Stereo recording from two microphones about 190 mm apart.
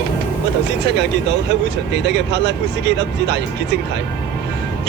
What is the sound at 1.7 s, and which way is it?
Speech, 65° right (ahead or behind).